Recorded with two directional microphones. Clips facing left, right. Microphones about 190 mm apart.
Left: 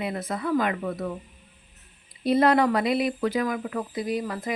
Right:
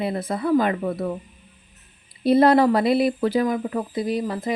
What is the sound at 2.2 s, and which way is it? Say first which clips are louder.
Speech: right 5 dB; 35° right (ahead or behind).